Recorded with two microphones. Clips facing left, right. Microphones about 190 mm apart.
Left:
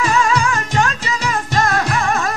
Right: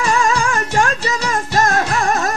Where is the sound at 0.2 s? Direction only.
45° right (ahead or behind).